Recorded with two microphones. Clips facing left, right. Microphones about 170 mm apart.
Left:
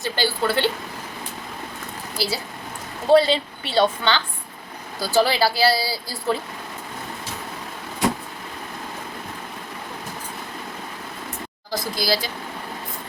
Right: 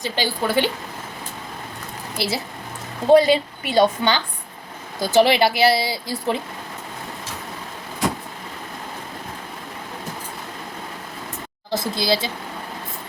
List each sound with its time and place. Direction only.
0.0 s a woman's voice: 15° right (ahead or behind)
2.1 s a woman's voice: 25° right (ahead or behind)
11.7 s speech: 25° right (ahead or behind)